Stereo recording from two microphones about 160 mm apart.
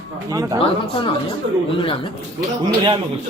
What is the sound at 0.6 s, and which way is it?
Speech, 30° left (ahead or behind).